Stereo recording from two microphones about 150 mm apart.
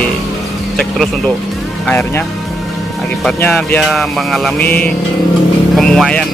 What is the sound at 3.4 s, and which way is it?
Speech, 10° left (ahead or behind).